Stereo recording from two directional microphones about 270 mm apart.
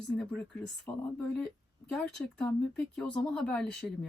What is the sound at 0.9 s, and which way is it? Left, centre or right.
Speech, centre.